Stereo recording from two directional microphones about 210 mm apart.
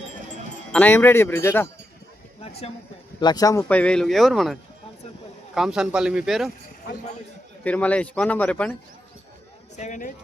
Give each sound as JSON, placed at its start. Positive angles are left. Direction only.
{"t": 0.7, "sound": "speech", "side_deg": 5}
{"t": 2.4, "sound": "speech", "side_deg": 30}
{"t": 5.5, "sound": "speech", "side_deg": -5}
{"t": 7.6, "sound": "speech", "side_deg": 5}
{"t": 9.7, "sound": "speech", "side_deg": 35}